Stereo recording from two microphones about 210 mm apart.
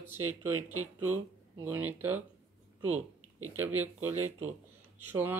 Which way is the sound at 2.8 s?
85° right.